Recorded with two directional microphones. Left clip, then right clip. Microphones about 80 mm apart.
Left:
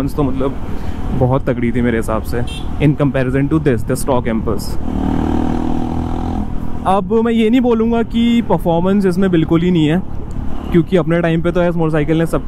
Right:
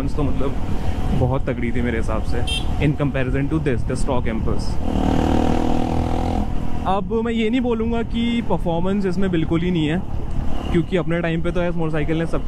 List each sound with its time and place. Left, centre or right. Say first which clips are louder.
0.0 s speech: left 7 dB; left
4.9 s vehicle: left 1 dB; right
6.8 s speech: left 7 dB; left